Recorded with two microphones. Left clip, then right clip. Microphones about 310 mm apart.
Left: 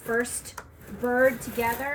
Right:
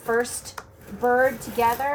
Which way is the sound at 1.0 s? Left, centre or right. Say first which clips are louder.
Right 5 dB; centre.